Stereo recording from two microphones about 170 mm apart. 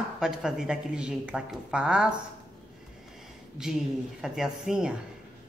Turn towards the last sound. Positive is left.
turn(degrees=-5)  # may be behind; listen again after turning